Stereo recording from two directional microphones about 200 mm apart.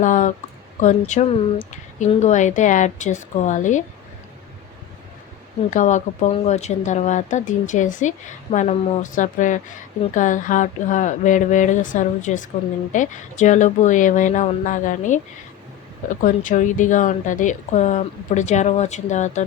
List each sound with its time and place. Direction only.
0.0 s speech: 40° left (ahead or behind)
5.7 s speech: 40° left (ahead or behind)